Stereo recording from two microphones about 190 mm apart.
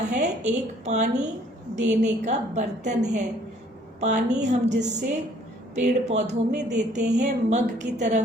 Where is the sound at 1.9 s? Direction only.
40° right (ahead or behind).